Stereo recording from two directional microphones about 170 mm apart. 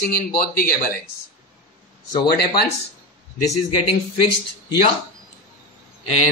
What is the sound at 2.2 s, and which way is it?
Speech, 70° left (ahead or behind).